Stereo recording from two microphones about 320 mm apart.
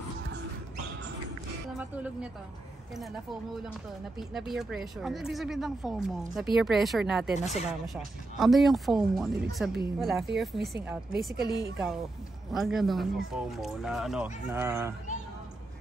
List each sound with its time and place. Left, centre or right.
4.2 s speech: centre
11.3 s a woman's voice: right
12.5 s speech: centre